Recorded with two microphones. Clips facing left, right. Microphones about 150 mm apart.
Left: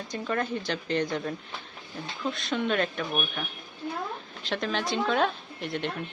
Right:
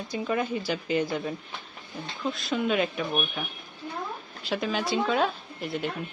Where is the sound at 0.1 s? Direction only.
5° right (ahead or behind).